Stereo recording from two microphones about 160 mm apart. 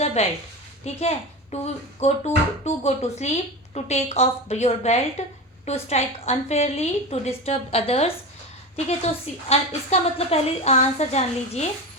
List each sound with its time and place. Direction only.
0.0 s a sound: 40° left (ahead or behind)
0.9 s a woman's voice: 40° left (ahead or behind)
9.5 s speech: 40° left (ahead or behind)